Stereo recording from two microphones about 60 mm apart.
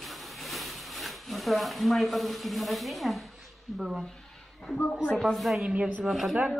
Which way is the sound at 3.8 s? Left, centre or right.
Centre.